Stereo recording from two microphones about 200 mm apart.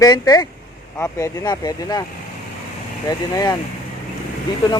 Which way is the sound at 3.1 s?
20° left (ahead or behind).